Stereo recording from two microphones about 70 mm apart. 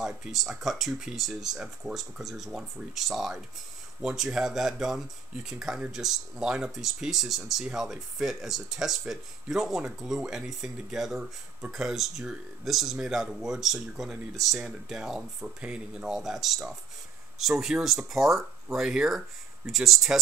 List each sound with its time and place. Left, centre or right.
0.0 s speech: centre